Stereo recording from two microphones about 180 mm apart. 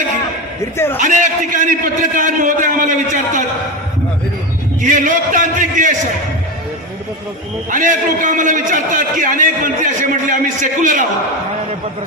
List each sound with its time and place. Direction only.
0.9 s a man's voice: 45° right (ahead or behind)
4.8 s a man's voice: 45° right (ahead or behind)
7.7 s a man's voice: 45° right (ahead or behind)